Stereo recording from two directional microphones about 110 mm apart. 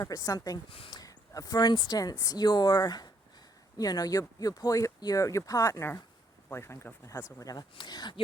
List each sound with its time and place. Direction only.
0.0 s speech: 30° left (ahead or behind)
0.7 s speech: 55° left (ahead or behind)
0.9 s speech: 30° left (ahead or behind)